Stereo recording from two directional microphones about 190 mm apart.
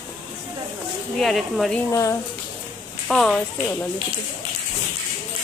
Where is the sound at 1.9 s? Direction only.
15° left (ahead or behind).